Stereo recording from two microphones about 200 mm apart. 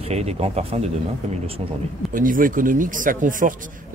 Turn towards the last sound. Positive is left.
turn(degrees=-40)  # may be behind; listen again after turning